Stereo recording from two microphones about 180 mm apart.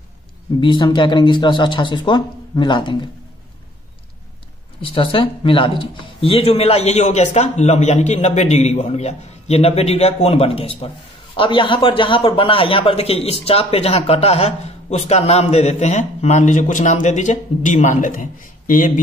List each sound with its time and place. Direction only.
0.6 s speech: 25° left (ahead or behind)
4.8 s a man's voice: 30° left (ahead or behind); by 18.9 s 50° left (ahead or behind)